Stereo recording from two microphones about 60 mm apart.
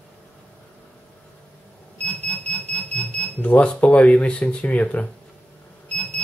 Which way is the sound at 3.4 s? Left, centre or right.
Left.